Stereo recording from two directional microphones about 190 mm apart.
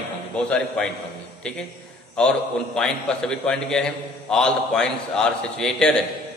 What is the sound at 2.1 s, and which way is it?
A man's voice, 5° left (ahead or behind).